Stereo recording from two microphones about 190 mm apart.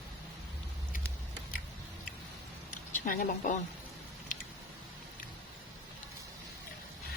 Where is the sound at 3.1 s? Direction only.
45° left (ahead or behind).